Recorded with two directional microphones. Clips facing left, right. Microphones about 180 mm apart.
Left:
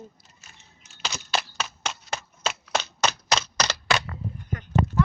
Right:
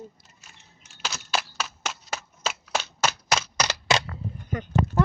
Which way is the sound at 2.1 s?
5° right (ahead or behind).